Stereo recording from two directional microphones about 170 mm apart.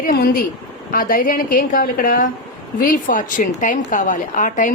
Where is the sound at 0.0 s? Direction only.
55° left (ahead or behind).